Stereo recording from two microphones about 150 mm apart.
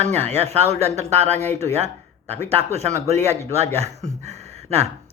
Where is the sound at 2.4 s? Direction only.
45° right (ahead or behind).